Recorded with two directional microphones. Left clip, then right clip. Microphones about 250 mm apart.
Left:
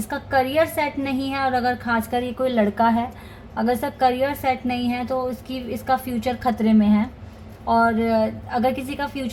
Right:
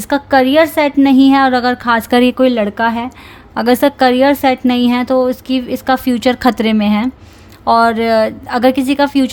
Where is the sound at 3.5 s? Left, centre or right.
Right.